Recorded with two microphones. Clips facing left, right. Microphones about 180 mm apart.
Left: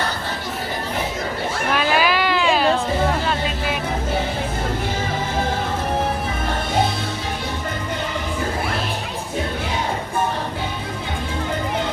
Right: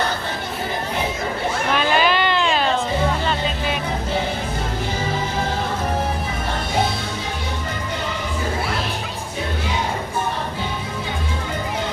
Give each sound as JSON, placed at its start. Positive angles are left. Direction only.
{"t": 1.7, "sound": "cat", "side_deg": 5}